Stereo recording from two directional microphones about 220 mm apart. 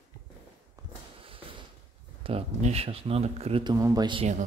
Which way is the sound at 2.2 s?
30° right (ahead or behind).